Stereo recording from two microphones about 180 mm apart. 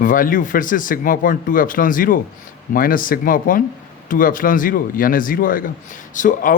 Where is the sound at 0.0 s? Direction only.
50° left (ahead or behind).